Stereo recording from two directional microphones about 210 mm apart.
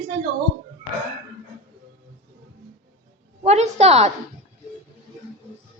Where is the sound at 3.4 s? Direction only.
30° right (ahead or behind).